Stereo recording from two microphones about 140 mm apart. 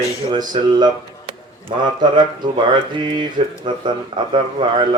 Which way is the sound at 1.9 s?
30° right (ahead or behind).